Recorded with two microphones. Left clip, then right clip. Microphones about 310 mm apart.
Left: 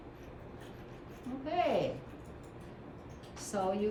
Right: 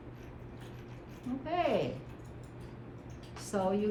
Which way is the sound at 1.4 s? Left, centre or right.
Right.